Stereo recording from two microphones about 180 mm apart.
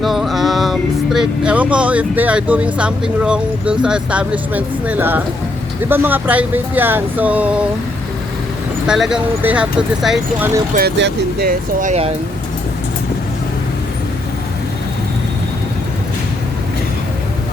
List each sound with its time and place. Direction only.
0.0 s speech: centre (ahead or behind)
8.9 s speech: 5° right (ahead or behind)
10.8 s speech: 70° right (ahead or behind)
11.8 s speech: 40° right (ahead or behind)